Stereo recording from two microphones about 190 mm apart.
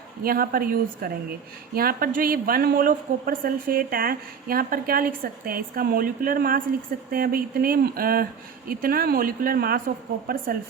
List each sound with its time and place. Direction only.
0.2 s a woman's voice: 50° right (ahead or behind)